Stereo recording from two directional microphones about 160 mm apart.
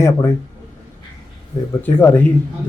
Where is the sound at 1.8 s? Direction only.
15° left (ahead or behind).